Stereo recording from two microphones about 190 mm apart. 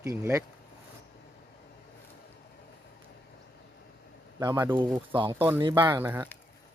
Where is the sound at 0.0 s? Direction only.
15° right (ahead or behind).